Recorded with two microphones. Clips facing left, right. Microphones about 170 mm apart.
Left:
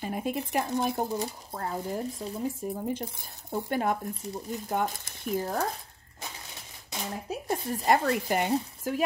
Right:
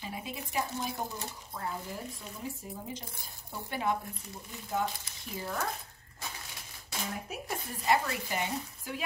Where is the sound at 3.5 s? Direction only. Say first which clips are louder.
Left 5 dB; 50° left (ahead or behind).